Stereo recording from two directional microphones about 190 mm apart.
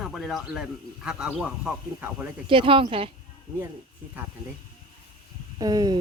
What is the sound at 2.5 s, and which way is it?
Speech, 25° right (ahead or behind).